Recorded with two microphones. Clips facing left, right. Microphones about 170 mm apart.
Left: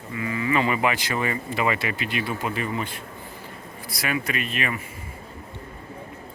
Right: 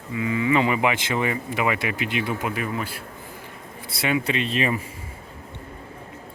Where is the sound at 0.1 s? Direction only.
15° right (ahead or behind).